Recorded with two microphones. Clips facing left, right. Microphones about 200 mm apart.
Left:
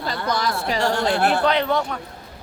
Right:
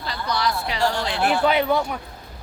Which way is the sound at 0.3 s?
50° left (ahead or behind).